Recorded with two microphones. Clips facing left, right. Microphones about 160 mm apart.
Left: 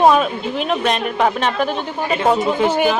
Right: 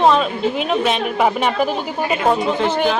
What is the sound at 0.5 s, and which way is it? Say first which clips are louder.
Speech: right 1 dB; centre (ahead or behind).